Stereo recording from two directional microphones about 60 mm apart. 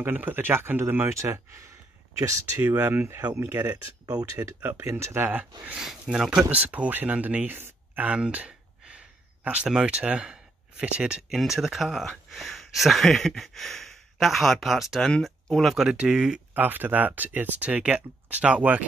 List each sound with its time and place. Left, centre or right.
0.0 s speech: right
2.1 s speech: right
2.9 s speech: right
4.0 s speech: right
4.6 s speech: right
5.3 s speech: right
6.1 s speech: centre
6.5 s speech: right
8.2 s a sound: right
9.8 s speech: centre
11.2 s a sound: centre
15.2 s speech: centre
16.0 s speech: centre
16.5 s speech: right